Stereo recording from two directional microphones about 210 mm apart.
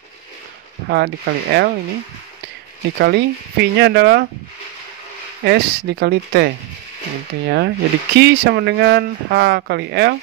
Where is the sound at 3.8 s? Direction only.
55° right (ahead or behind).